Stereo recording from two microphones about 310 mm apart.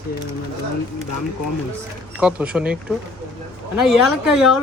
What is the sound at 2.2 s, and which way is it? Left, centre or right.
Speech, centre.